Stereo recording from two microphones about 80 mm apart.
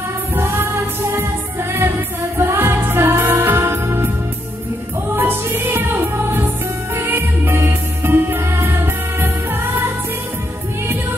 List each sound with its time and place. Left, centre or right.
0.3 s music: right
5.1 s music: right